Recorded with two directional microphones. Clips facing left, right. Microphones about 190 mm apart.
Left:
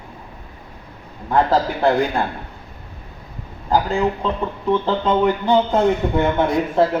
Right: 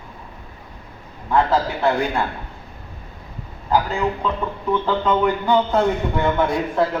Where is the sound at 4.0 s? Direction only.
25° left (ahead or behind).